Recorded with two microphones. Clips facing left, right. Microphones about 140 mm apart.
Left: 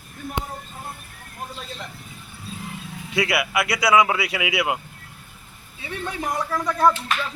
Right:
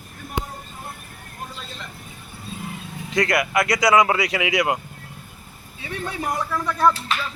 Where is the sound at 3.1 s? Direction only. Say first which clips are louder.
Right 2 dB; 5° left (ahead or behind).